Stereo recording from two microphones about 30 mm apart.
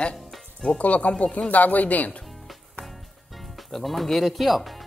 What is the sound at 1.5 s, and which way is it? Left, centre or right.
Speech, left.